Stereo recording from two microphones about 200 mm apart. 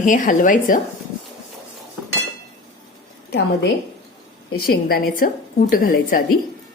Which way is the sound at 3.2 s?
55° left (ahead or behind).